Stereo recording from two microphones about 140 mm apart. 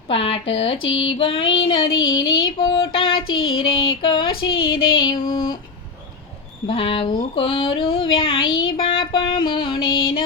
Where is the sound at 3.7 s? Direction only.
35° left (ahead or behind).